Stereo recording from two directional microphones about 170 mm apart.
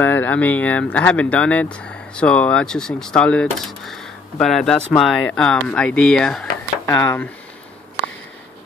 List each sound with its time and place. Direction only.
0.0 s speech: 10° left (ahead or behind)
6.9 s speech: 15° left (ahead or behind)